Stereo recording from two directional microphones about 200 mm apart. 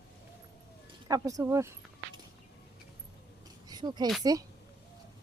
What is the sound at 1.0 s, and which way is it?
Speech, 15° right (ahead or behind).